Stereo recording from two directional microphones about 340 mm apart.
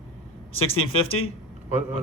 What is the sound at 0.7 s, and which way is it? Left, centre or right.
Speech, left.